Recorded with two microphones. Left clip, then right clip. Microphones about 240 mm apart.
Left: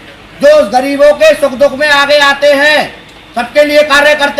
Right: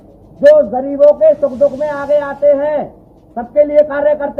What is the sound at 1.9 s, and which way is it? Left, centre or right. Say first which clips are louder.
Speech: left 9 dB; left.